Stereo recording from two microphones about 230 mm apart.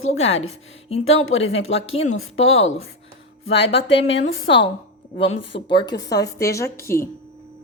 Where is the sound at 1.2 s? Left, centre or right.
Left.